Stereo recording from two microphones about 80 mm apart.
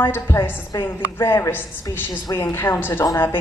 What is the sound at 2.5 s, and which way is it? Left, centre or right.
Speech, left.